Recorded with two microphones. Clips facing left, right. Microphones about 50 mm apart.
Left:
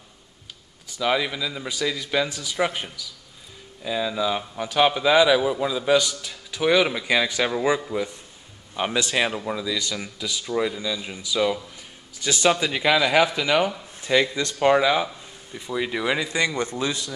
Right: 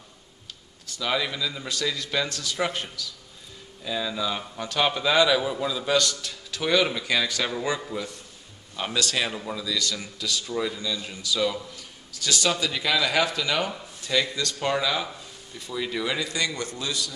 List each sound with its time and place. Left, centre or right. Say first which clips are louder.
0.8 s a man's voice: left 4 dB; centre